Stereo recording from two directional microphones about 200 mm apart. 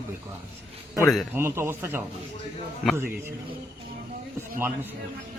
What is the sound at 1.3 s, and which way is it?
Speech, 10° right (ahead or behind).